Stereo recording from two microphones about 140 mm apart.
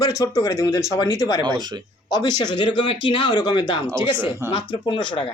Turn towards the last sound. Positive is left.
turn(degrees=35)  # may be behind; listen again after turning